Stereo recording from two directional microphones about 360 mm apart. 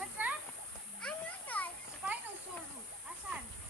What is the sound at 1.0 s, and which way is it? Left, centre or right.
Children playing, centre.